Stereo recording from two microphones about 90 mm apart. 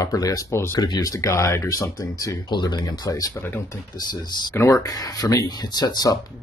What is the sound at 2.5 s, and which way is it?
Speech, 55° left (ahead or behind).